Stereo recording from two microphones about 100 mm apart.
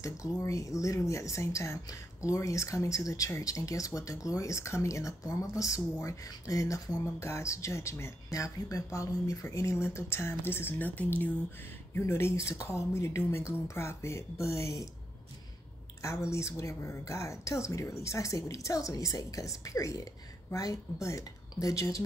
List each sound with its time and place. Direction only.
0.0 s speech: 30° left (ahead or behind)
16.0 s speech: 30° left (ahead or behind)